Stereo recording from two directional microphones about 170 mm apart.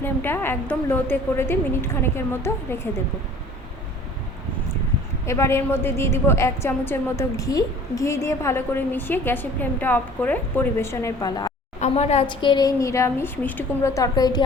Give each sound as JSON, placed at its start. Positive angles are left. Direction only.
{"t": 0.0, "sound": "a woman's voice", "side_deg": 10}
{"t": 5.2, "sound": "a woman's voice", "side_deg": 15}
{"t": 11.8, "sound": "a woman's voice", "side_deg": 40}